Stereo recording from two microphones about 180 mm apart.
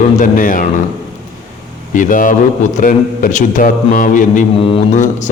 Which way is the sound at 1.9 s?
45° left (ahead or behind).